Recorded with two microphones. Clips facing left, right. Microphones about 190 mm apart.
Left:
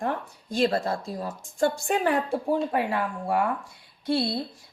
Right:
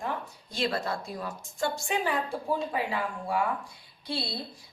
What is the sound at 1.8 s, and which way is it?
Speech, 55° left (ahead or behind).